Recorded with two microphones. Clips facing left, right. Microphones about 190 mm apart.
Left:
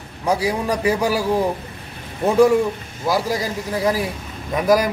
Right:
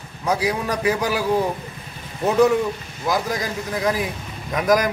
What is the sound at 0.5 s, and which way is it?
Speech, 10° left (ahead or behind).